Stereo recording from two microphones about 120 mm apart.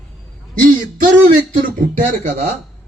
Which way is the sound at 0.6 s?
90° right.